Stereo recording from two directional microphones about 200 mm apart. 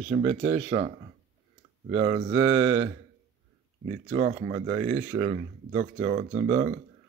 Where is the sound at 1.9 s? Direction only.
25° right (ahead or behind).